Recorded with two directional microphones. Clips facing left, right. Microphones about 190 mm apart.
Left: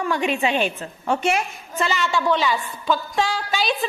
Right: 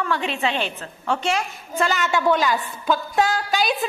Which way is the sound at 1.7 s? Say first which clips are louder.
Right 1 dB; 5° right (ahead or behind).